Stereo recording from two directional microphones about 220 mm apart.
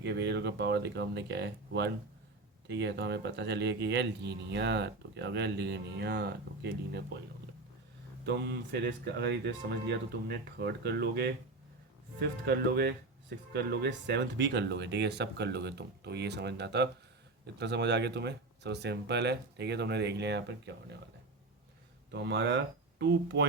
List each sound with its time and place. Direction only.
0.0 s speech: 50° right (ahead or behind)
8.2 s speech: 50° right (ahead or behind)
22.1 s speech: 50° right (ahead or behind)